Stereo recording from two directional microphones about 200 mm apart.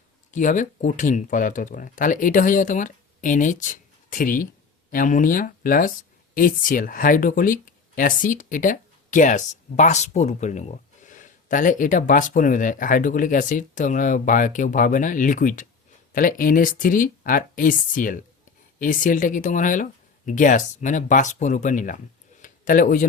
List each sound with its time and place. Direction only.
0.3 s speech: 40° left (ahead or behind)